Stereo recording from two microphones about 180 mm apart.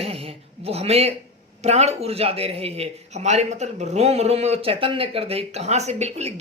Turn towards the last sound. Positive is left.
turn(degrees=-40)  # may be behind; listen again after turning